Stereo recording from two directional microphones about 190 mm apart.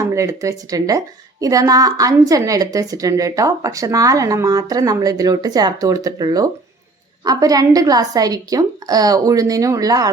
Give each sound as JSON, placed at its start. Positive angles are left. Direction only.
{"t": 0.0, "sound": "a woman's voice", "side_deg": -15}